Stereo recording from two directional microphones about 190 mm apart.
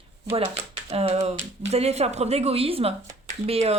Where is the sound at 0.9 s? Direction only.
30° right (ahead or behind).